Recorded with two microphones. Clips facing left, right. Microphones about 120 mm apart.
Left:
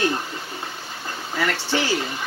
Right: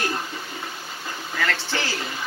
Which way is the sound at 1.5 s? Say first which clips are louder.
Left 4 dB; 15° left (ahead or behind).